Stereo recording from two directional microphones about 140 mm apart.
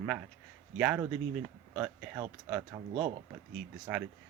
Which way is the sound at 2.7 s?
40° right (ahead or behind).